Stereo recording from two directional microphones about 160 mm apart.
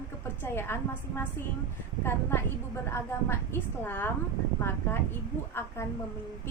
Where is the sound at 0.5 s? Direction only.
15° left (ahead or behind).